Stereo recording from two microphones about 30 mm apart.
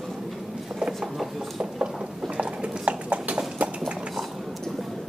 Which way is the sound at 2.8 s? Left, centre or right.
Right.